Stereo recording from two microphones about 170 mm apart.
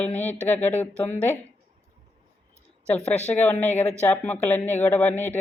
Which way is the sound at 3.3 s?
10° left (ahead or behind).